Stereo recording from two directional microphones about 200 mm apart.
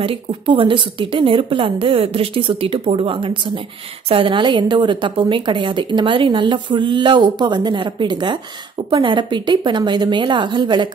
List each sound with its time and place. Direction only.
0.0 s a woman's voice: 25° right (ahead or behind)